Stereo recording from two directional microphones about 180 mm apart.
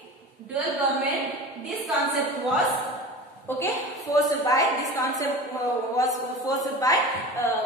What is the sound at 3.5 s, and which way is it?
A woman's voice, 10° left (ahead or behind).